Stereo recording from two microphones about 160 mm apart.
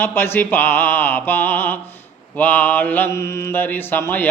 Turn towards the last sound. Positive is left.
turn(degrees=15)  # may be behind; listen again after turning